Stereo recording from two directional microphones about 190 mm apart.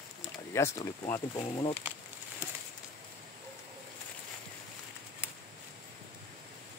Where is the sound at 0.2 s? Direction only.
15° left (ahead or behind).